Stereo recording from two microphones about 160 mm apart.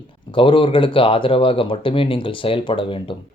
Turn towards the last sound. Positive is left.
turn(degrees=35)  # may be behind; listen again after turning